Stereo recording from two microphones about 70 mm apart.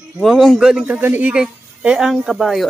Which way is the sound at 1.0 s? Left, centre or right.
Right.